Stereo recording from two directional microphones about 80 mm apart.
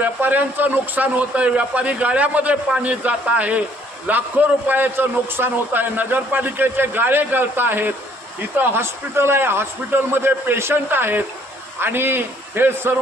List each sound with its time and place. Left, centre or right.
0.0 s a man's voice: right